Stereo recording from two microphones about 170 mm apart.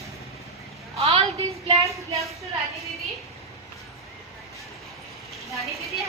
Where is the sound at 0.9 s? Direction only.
35° right (ahead or behind).